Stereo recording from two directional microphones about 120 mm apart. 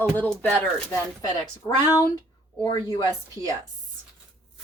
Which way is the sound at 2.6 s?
30° left (ahead or behind).